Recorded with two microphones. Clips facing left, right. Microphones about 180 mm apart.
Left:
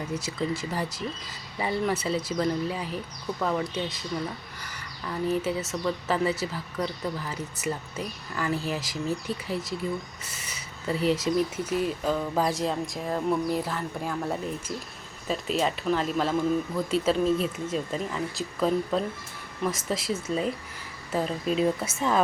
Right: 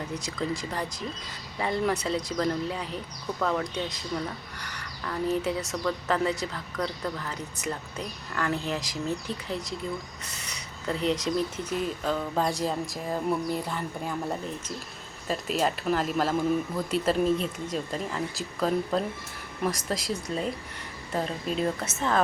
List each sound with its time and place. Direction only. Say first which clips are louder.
0.1 s speech: left 3 dB; 5° left (ahead or behind)
10.2 s speech: even; 5° left (ahead or behind)